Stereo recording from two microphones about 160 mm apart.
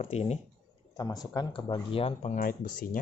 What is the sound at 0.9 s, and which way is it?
Speech, 25° left (ahead or behind).